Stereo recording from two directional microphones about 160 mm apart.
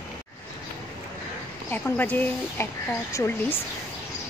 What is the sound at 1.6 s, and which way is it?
Speech, 10° left (ahead or behind).